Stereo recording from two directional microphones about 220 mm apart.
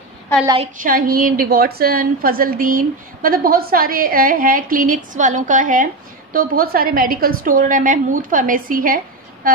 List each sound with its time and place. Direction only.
0.7 s a woman's voice: 40° right (ahead or behind)